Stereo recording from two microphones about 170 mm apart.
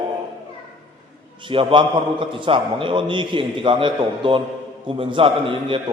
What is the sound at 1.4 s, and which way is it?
A man's voice, 30° right (ahead or behind).